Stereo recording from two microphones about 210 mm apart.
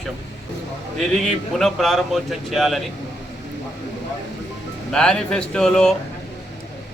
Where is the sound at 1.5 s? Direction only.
Centre (ahead or behind).